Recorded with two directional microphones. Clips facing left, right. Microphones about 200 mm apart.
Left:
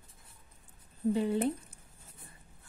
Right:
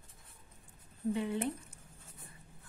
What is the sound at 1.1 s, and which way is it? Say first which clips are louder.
Speech: left 6 dB; 35° left (ahead or behind).